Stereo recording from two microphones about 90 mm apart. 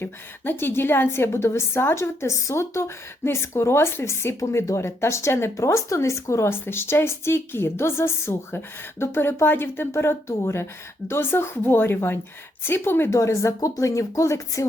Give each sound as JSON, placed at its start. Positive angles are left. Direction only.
{"t": 0.0, "sound": "a woman's voice", "side_deg": 25}